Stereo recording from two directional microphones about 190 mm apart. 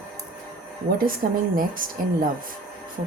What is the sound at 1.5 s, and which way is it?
Speech, 45° right (ahead or behind).